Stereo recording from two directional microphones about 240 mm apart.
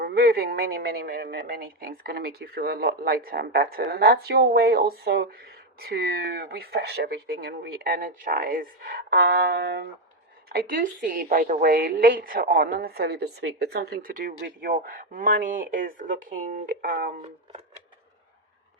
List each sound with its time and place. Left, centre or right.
0.0 s a woman's voice: right